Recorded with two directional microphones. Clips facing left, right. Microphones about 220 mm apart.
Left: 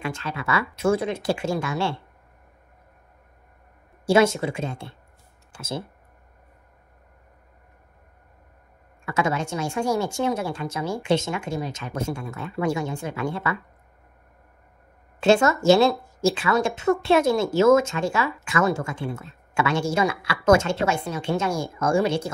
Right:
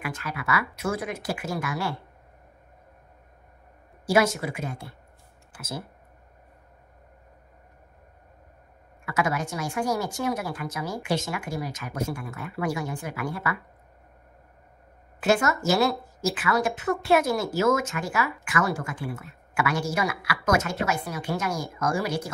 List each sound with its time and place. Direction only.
0.0 s speech: 25° left (ahead or behind)
4.0 s speech: 25° left (ahead or behind)
9.0 s speech: 25° left (ahead or behind)
15.1 s speech: 25° left (ahead or behind)